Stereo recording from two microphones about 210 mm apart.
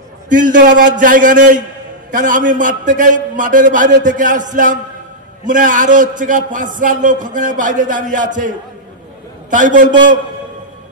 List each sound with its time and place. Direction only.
0.3 s a man's voice: 40° right (ahead or behind)